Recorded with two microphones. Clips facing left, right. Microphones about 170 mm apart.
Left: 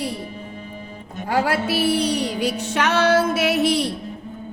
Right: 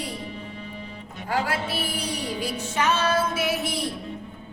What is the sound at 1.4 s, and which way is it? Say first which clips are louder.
Music: left 8 dB; 75° left (ahead or behind).